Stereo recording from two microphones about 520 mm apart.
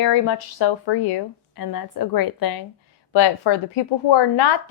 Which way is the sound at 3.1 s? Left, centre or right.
Left.